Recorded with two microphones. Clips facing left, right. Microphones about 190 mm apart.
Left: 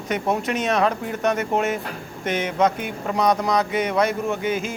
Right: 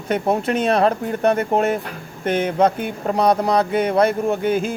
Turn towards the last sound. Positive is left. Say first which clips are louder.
# right 5 dB
turn(degrees=-35)  # may be behind; listen again after turning